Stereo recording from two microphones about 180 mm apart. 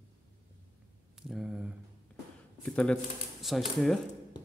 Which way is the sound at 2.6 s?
5° left (ahead or behind).